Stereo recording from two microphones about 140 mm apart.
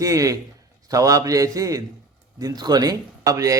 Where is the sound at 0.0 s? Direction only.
25° right (ahead or behind).